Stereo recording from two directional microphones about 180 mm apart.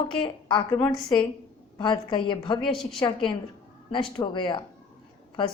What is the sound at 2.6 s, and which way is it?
Speech, centre (ahead or behind).